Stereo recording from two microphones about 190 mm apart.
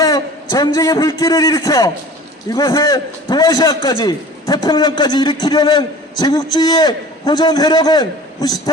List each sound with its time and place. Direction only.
0.0 s a man's voice: 20° left (ahead or behind)